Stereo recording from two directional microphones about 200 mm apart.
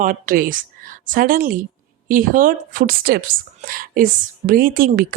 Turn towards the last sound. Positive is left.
turn(degrees=-45)  # may be behind; listen again after turning